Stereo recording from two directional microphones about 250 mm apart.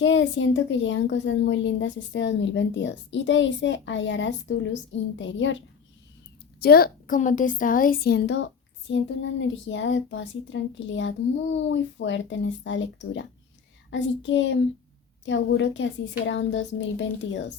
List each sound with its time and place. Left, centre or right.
0.0 s a woman's voice: left
6.6 s a woman's voice: left